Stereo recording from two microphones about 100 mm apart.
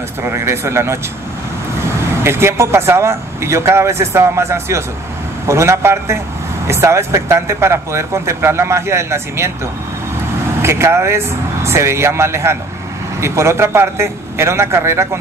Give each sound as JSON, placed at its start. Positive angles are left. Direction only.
{"t": 0.2, "sound": "speech", "side_deg": -25}
{"t": 10.6, "sound": "speech", "side_deg": -25}